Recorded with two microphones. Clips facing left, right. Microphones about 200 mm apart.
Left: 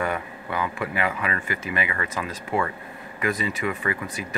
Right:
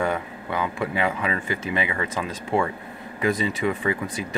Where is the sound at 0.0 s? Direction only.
20° right (ahead or behind).